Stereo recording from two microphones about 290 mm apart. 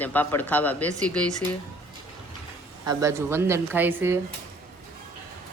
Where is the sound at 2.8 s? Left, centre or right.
Centre.